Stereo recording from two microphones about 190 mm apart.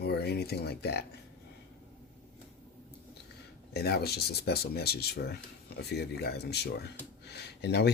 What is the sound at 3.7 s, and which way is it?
Speech, 55° left (ahead or behind).